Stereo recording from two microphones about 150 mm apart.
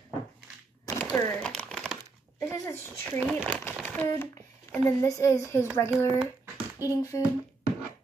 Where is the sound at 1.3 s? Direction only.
5° left (ahead or behind).